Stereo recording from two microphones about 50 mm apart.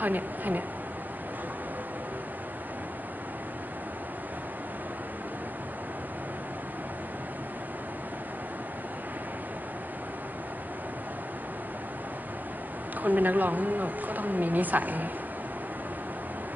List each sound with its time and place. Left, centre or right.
0.0 s a woman's voice: right
13.0 s a woman's voice: right